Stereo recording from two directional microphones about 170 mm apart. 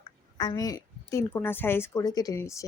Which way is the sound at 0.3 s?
20° left (ahead or behind).